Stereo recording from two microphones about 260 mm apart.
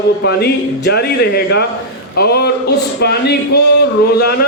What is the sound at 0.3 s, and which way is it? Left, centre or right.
A man's voice, left.